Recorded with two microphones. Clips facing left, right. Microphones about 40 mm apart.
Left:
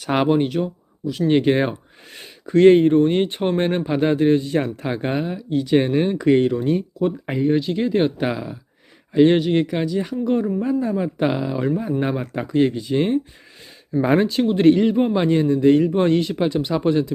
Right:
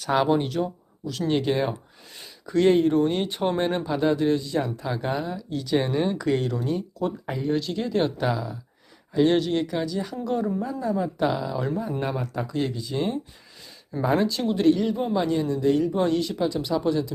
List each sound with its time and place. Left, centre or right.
0.0 s speech: left
0.4 s speech: centre
1.3 s a man's voice: left